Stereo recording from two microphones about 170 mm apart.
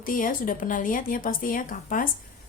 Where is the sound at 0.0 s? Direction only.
55° left (ahead or behind).